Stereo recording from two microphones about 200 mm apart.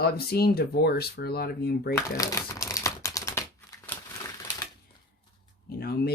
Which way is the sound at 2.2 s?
15° left (ahead or behind).